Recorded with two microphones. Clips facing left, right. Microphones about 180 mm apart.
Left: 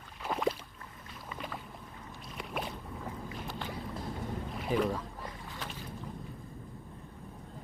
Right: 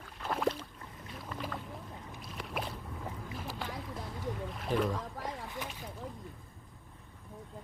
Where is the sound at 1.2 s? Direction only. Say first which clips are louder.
Right 2 dB; centre (ahead or behind).